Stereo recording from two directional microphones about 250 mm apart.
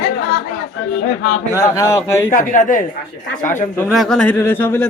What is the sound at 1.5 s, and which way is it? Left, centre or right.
Speech, centre.